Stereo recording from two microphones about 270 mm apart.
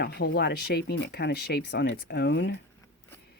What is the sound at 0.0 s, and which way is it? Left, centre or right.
Speech, left.